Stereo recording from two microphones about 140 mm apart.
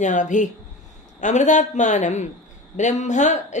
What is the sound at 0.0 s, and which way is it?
Speech, 65° left (ahead or behind).